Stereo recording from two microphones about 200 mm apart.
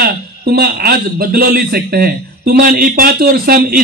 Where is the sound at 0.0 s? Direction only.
50° right (ahead or behind).